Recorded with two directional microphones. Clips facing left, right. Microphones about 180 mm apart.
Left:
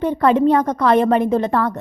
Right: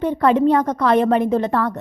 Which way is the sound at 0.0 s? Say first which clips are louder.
Left 1 dB; 35° left (ahead or behind).